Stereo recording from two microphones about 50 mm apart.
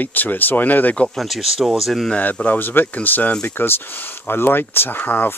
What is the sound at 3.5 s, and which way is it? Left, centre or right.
Speech, left.